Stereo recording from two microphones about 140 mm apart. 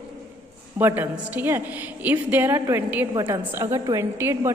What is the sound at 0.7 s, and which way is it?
A woman's voice, 15° right (ahead or behind).